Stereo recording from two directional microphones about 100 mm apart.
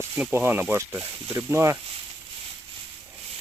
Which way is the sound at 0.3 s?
20° right (ahead or behind).